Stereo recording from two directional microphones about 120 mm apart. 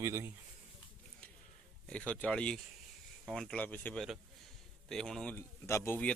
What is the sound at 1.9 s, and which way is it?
Speech, 10° left (ahead or behind).